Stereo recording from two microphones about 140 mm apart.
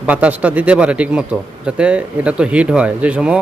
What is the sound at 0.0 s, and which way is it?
A man's voice, 10° right (ahead or behind).